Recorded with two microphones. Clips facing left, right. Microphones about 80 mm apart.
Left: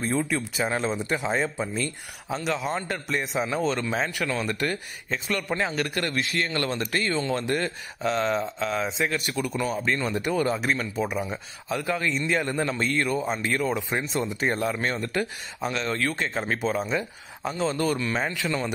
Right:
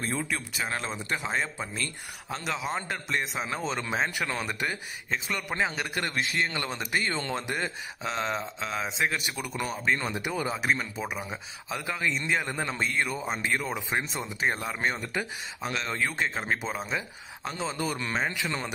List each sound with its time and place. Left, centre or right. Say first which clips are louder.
0.0 s a man's voice: left 5 dB; centre
7.1 s speech: left 5 dB; right
7.3 s speech: left 5 dB; centre
18.3 s a man's voice: left 4 dB; centre